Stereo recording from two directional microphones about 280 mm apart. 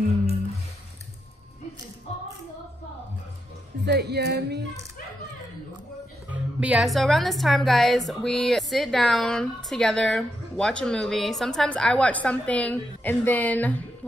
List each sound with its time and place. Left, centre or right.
3.8 s speech: right
6.3 s speech: centre